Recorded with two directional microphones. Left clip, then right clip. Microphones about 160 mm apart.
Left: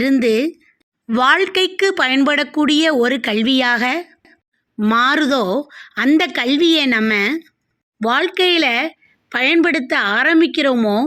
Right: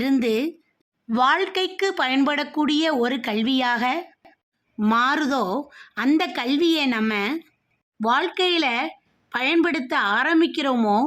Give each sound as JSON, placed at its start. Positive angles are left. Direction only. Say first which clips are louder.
{"t": 0.0, "sound": "a woman's voice", "louder": "left 7 dB", "side_deg": 20}